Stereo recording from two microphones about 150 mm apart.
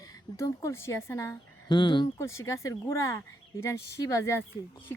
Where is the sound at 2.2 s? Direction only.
20° left (ahead or behind).